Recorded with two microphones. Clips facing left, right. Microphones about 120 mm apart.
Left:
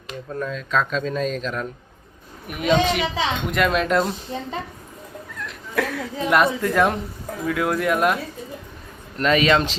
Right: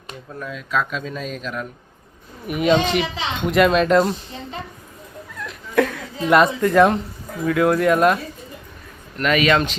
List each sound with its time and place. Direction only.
0.3 s speech: 10° right (ahead or behind)
5.4 s speech: centre (ahead or behind)
9.1 s a man's voice: 30° left (ahead or behind)